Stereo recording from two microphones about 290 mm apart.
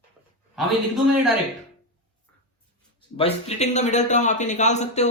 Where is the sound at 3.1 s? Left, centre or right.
Left.